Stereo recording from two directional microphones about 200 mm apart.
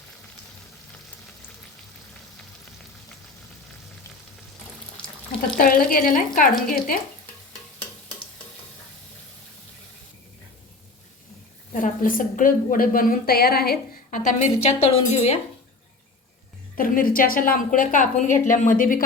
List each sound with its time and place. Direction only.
5.5 s a woman's voice: 45° left (ahead or behind)
11.7 s a woman's voice: 40° left (ahead or behind)
16.7 s a woman's voice: 45° left (ahead or behind)